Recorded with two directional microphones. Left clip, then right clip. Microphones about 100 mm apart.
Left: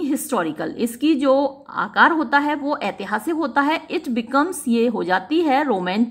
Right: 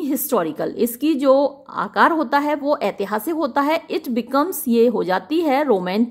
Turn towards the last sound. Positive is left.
turn(degrees=-35)  # may be behind; listen again after turning